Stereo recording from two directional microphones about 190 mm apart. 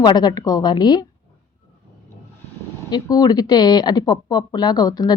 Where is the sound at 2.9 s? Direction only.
20° left (ahead or behind).